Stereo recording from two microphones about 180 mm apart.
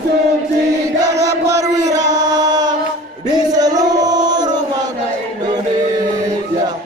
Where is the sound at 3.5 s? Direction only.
20° right (ahead or behind).